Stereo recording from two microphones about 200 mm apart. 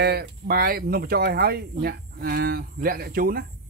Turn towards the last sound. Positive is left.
turn(degrees=-50)  # may be behind; listen again after turning